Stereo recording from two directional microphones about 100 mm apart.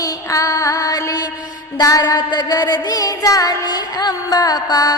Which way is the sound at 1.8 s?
40° left (ahead or behind).